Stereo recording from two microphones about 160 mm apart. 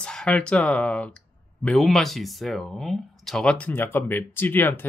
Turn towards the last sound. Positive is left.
turn(degrees=10)  # may be behind; listen again after turning